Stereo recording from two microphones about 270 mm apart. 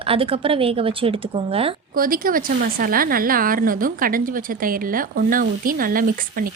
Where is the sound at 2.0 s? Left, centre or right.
Right.